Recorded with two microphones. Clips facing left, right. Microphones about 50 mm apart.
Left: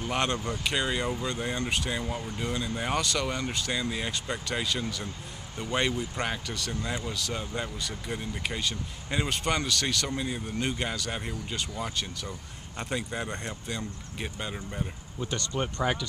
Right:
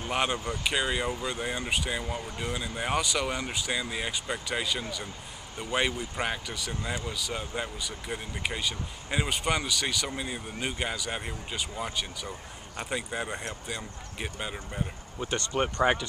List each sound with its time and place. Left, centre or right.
0.0 s speech: centre